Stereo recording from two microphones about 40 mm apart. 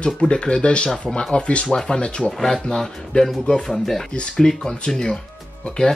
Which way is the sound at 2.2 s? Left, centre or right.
Centre.